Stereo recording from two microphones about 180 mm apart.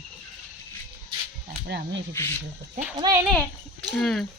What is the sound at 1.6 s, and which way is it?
Speech, 70° right (ahead or behind).